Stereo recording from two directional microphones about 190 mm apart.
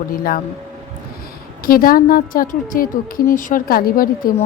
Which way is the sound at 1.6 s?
50° left (ahead or behind).